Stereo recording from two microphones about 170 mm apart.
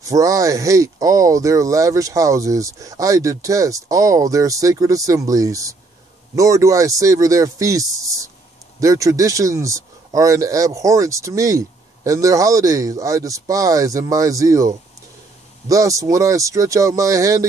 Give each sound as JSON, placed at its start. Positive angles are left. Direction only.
{"t": 0.0, "sound": "a man's voice", "side_deg": -20}